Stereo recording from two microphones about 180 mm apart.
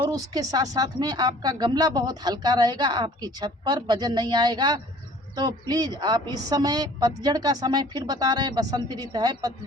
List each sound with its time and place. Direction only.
0.0 s a woman's voice: 20° right (ahead or behind)